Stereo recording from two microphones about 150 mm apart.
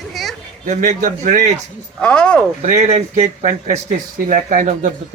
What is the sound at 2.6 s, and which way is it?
Speech, 50° right (ahead or behind).